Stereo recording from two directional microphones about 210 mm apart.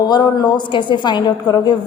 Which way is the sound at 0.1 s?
20° left (ahead or behind).